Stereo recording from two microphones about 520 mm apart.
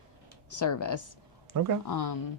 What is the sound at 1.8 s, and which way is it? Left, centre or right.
Speech, left.